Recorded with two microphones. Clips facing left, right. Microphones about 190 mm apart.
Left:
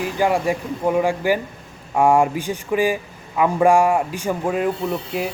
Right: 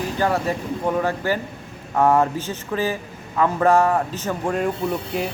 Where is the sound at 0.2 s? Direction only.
15° left (ahead or behind).